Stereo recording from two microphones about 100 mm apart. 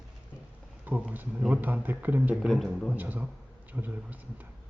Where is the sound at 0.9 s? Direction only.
15° right (ahead or behind).